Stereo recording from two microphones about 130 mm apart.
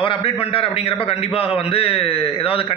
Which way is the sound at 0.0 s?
45° left (ahead or behind).